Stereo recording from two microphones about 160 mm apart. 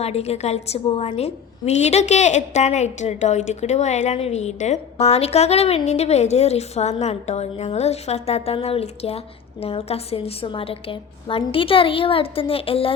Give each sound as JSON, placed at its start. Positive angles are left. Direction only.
{"t": 0.0, "sound": "a woman's voice", "side_deg": 40}